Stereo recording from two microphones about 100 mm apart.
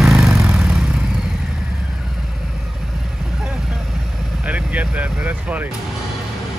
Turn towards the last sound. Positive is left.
turn(degrees=-15)  # may be behind; listen again after turning